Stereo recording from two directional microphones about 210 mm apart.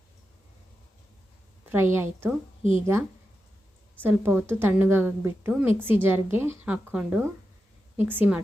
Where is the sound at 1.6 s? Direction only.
10° right (ahead or behind).